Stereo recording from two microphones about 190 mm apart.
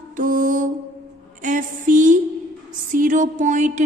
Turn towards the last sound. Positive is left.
turn(degrees=-40)  # may be behind; listen again after turning